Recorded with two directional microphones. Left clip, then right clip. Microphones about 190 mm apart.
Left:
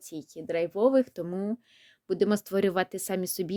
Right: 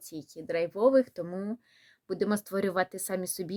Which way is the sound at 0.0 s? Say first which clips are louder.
Left 2 dB; 30° left (ahead or behind).